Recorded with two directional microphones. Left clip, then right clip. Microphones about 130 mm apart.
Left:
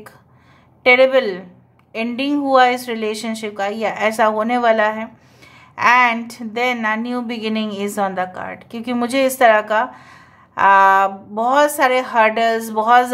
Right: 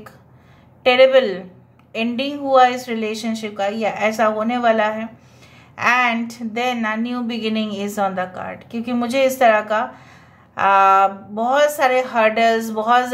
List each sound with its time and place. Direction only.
0.8 s speech: 35° left (ahead or behind)